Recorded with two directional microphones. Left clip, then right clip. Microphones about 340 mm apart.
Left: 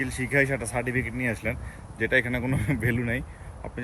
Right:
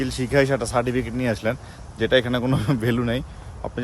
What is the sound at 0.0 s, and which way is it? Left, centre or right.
Speech, centre.